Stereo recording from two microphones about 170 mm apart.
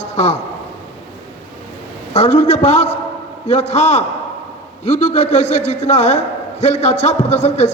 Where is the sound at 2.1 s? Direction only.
40° left (ahead or behind).